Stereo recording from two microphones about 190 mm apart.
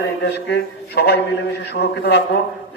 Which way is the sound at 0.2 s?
60° left (ahead or behind).